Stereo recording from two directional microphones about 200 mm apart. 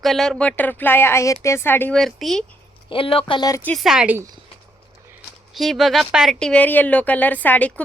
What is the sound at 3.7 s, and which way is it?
Speech, centre (ahead or behind).